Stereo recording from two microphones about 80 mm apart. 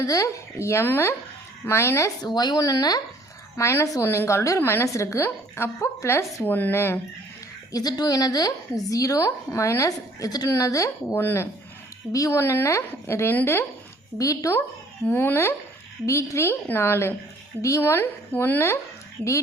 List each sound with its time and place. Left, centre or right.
0.0 s a woman's voice: left
2.2 s a woman's voice: left
3.6 s a woman's voice: left
7.7 s a woman's voice: left
14.2 s a woman's voice: left
15.0 s a woman's voice: left